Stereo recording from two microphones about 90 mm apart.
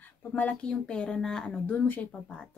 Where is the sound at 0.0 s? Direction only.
15° left (ahead or behind).